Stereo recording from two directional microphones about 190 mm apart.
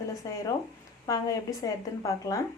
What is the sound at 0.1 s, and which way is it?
A woman's voice, 15° left (ahead or behind).